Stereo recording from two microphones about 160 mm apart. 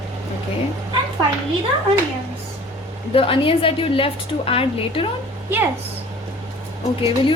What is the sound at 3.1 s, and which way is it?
A woman's voice, 35° left (ahead or behind).